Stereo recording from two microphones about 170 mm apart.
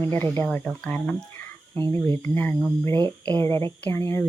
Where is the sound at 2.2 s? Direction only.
10° left (ahead or behind).